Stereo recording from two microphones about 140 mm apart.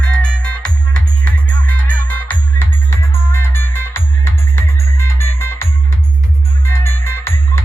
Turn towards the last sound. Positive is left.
turn(degrees=15)  # may be behind; listen again after turning